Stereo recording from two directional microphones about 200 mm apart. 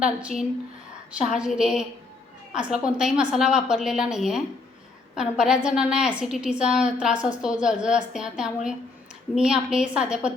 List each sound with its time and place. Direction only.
0.0 s a woman's voice: 5° right (ahead or behind)